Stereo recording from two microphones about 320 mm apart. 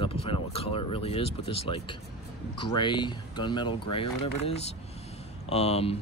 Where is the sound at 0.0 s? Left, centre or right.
Centre.